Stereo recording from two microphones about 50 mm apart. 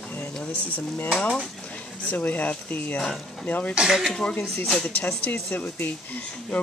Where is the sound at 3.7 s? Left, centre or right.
Centre.